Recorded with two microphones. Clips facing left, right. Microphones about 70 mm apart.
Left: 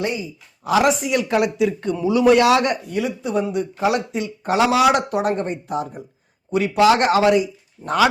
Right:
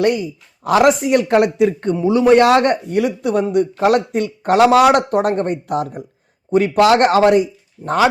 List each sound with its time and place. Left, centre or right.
0.0 s speech: right
2.0 s speech: right
6.5 s speech: right